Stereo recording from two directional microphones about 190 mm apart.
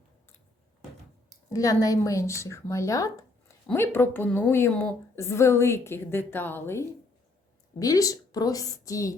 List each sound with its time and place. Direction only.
1.5 s a woman's voice: 20° left (ahead or behind)